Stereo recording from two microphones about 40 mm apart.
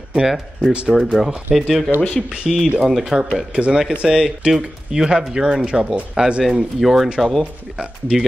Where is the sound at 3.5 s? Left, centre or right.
Right.